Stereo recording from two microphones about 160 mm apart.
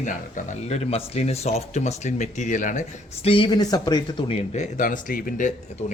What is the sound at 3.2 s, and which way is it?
Speech, 35° left (ahead or behind).